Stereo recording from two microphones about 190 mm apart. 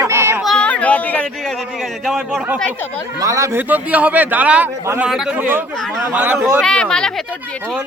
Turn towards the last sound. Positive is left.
turn(degrees=5)  # may be behind; listen again after turning